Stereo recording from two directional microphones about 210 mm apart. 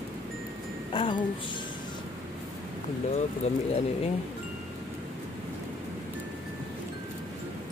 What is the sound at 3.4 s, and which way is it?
Speech, 30° left (ahead or behind).